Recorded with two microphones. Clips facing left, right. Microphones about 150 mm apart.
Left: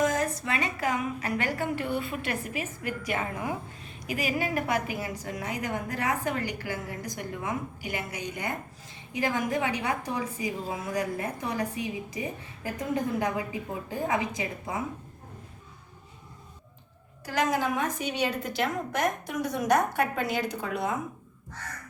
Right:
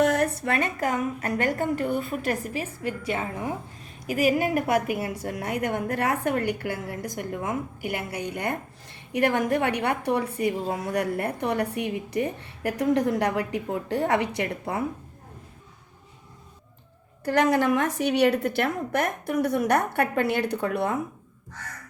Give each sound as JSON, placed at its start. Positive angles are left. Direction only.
{"t": 0.0, "sound": "a woman's voice", "side_deg": -65}
{"t": 4.0, "sound": "a woman's voice", "side_deg": -45}
{"t": 17.2, "sound": "a woman's voice", "side_deg": -65}